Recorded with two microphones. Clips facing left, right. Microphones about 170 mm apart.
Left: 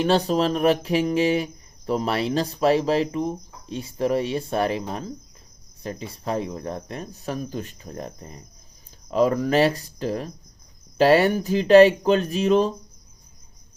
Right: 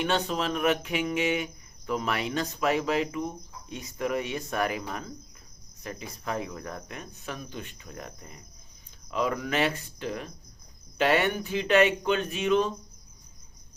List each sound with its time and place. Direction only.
0.0 s speech: 35° left (ahead or behind)